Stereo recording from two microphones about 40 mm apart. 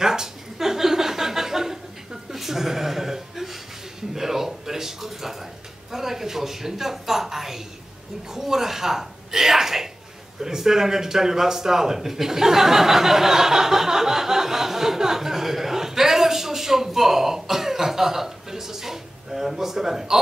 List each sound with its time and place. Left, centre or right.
0.0 s chuckle: centre
4.1 s a man's voice: centre